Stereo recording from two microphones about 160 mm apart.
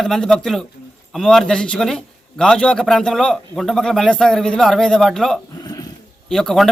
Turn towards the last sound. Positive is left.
turn(degrees=0)  # may be behind; listen again after turning